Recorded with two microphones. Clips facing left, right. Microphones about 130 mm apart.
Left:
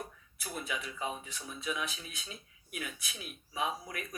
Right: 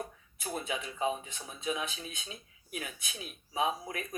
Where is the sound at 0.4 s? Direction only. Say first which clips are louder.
Right 3 dB; 30° right (ahead or behind).